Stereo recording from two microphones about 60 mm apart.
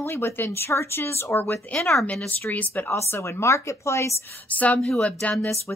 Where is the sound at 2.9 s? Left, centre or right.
Left.